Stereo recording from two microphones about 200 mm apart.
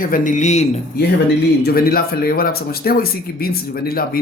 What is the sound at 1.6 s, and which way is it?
Speech, 50° left (ahead or behind).